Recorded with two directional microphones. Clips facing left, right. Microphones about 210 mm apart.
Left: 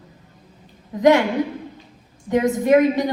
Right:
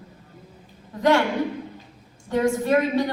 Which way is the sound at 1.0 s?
20° left (ahead or behind).